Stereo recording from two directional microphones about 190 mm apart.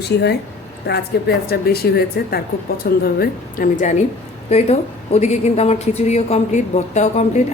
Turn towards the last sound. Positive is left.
turn(degrees=35)  # may be behind; listen again after turning